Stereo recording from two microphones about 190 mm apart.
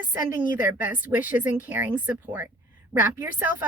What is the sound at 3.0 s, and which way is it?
Speech, 10° right (ahead or behind).